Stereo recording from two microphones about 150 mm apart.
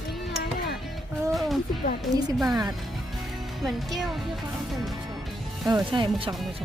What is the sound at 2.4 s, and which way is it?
Speech, centre (ahead or behind).